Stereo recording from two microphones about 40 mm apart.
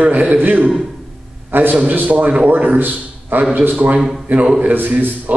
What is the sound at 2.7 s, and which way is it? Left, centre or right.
A man's voice, right.